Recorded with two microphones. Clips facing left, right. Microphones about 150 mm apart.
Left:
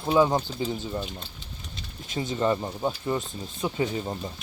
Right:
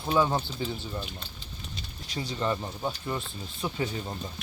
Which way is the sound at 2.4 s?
15° left (ahead or behind).